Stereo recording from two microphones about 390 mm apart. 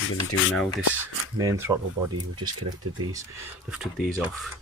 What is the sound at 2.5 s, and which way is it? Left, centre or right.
Speech, right.